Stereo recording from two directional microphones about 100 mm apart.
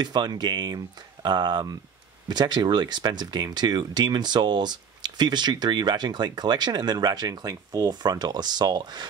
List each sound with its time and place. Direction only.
0.0 s speech: 45° right (ahead or behind)